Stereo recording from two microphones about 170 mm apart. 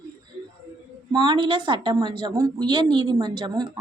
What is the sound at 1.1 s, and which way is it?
A woman's voice, 25° right (ahead or behind).